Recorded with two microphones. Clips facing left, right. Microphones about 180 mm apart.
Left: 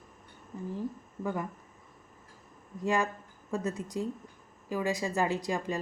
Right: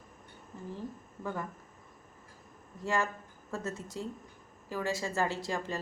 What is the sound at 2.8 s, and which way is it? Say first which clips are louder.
A woman's voice: left 3 dB; 15° left (ahead or behind).